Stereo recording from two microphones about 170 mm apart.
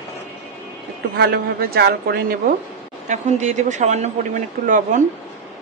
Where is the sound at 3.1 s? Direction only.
45° right (ahead or behind).